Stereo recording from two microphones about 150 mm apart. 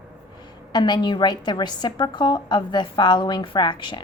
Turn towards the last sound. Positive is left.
turn(degrees=30)  # may be behind; listen again after turning